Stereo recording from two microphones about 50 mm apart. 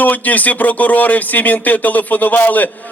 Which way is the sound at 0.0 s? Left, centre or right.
Left.